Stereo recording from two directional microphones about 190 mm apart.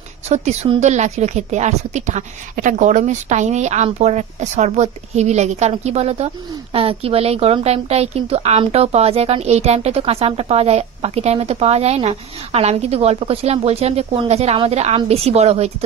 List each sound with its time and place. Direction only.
0.3 s a woman's voice: 35° right (ahead or behind)